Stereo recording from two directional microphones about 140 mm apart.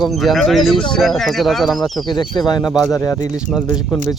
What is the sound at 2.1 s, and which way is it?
Speech, 30° left (ahead or behind).